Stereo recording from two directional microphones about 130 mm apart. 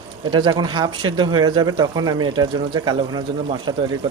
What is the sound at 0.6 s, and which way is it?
Speech, 35° right (ahead or behind).